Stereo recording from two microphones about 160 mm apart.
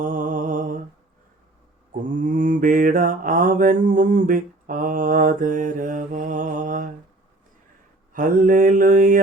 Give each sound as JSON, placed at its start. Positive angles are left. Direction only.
{"t": 0.0, "sound": "mantra", "side_deg": -55}
{"t": 2.2, "sound": "mantra", "side_deg": -55}
{"t": 8.1, "sound": "mantra", "side_deg": -55}